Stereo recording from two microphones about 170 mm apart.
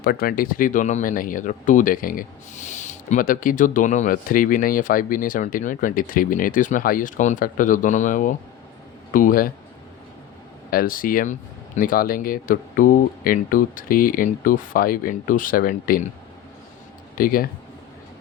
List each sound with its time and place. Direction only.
0.0 s speech: 60° left (ahead or behind)
10.7 s speech: 55° left (ahead or behind)
17.2 s speech: 55° left (ahead or behind)